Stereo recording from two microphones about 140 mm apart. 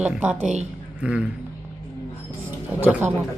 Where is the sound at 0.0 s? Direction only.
10° right (ahead or behind).